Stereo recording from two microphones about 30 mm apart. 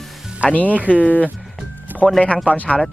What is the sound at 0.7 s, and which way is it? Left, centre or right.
Speech, right.